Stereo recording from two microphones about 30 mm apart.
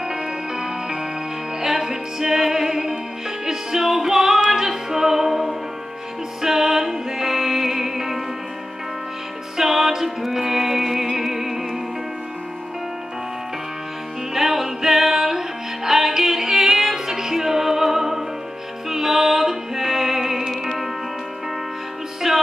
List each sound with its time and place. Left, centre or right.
0.1 s music: centre
9.6 s music: centre
14.3 s music: centre
22.2 s music: centre